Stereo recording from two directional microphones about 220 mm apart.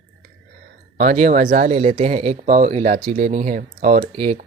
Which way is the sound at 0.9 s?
35° right (ahead or behind).